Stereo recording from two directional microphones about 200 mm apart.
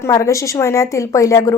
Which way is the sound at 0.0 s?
15° left (ahead or behind).